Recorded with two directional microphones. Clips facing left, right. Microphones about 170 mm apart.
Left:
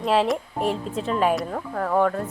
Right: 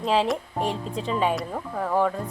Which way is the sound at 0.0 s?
Centre (ahead or behind).